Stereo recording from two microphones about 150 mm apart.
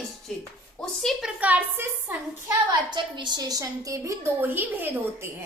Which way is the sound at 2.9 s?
30° right (ahead or behind).